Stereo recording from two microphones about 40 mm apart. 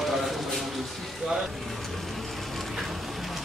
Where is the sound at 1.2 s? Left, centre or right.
Right.